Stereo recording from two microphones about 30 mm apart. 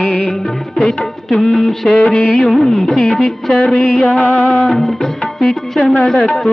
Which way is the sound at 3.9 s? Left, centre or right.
Left.